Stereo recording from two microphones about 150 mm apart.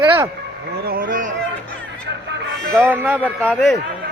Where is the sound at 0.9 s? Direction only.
70° right (ahead or behind).